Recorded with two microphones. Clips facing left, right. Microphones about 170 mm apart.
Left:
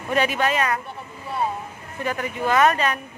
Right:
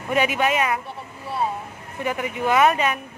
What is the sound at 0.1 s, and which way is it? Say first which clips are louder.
Speech: right 1 dB; 10° right (ahead or behind).